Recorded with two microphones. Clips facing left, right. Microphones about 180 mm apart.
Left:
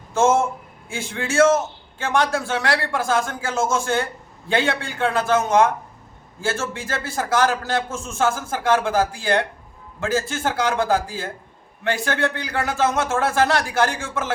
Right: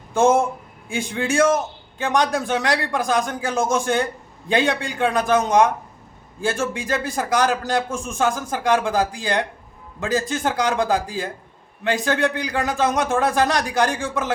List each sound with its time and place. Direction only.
0.1 s a man's voice: 15° right (ahead or behind)